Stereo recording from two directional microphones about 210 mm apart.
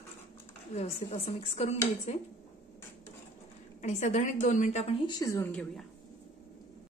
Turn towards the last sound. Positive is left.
turn(degrees=5)  # may be behind; listen again after turning